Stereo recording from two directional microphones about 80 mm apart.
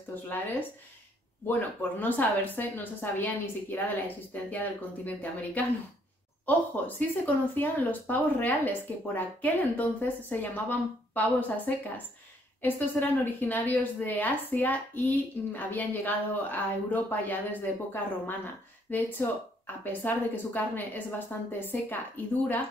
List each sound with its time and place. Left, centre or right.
0.1 s speech: left